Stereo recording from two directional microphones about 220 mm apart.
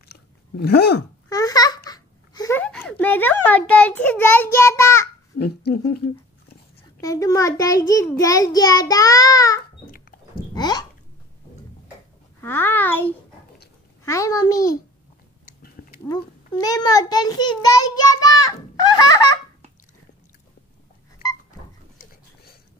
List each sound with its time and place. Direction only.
0.1 s chewing: 45° left (ahead or behind)
1.3 s a child's voice: 15° left (ahead or behind)
5.4 s speech: 45° left (ahead or behind)
7.0 s a child's voice: 15° left (ahead or behind)
9.8 s a sound: 40° left (ahead or behind)
10.5 s speech: 20° left (ahead or behind)
12.4 s a child's voice: 10° left (ahead or behind)
15.8 s dog: 40° left (ahead or behind)
16.6 s a child's voice: 15° left (ahead or behind)